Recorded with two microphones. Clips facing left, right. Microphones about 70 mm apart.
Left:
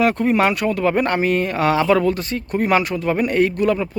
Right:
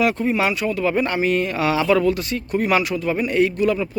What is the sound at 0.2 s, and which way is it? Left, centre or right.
Speech, left.